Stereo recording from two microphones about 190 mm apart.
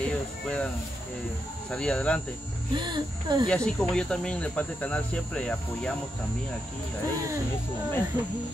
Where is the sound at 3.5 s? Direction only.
5° left (ahead or behind).